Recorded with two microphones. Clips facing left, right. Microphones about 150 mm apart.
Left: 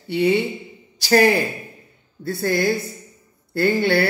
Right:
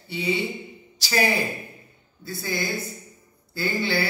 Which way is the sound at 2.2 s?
65° left (ahead or behind).